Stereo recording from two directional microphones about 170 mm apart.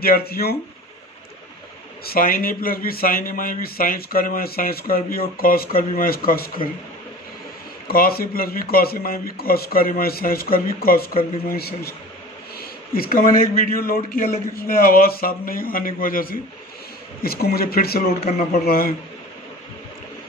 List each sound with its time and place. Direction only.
0.0 s speech: 60° left (ahead or behind)
2.0 s speech: 60° left (ahead or behind)
7.9 s speech: 60° left (ahead or behind)
12.5 s a sound: 60° left (ahead or behind)
13.7 s speech: 60° left (ahead or behind)